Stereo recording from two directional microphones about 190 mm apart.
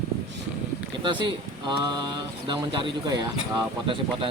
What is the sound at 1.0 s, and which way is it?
Speech, 25° right (ahead or behind).